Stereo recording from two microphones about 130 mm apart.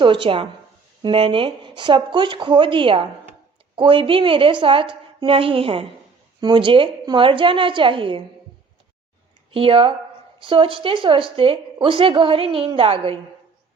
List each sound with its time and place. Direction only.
0.0 s a woman's voice: 40° right (ahead or behind)
9.5 s a woman's voice: 45° right (ahead or behind)